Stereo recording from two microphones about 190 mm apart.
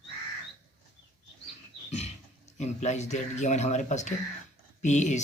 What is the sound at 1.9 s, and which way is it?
Speech, 35° left (ahead or behind).